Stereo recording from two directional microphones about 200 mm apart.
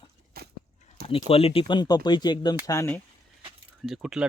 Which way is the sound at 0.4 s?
50° right (ahead or behind).